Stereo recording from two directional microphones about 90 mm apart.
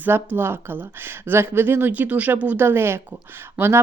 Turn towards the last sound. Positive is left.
turn(degrees=-25)  # may be behind; listen again after turning